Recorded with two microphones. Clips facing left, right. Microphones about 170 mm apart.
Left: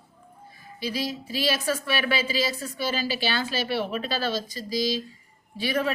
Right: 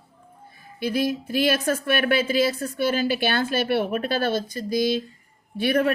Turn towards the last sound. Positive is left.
turn(degrees=-55)  # may be behind; listen again after turning